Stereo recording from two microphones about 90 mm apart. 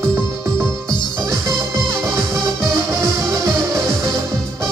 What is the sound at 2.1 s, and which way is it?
Music, 35° right (ahead or behind).